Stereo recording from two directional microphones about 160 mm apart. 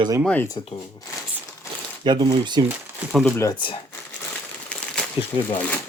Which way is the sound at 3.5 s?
30° left (ahead or behind).